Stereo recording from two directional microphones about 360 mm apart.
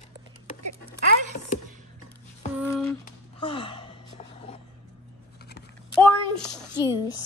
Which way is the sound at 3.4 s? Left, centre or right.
Centre.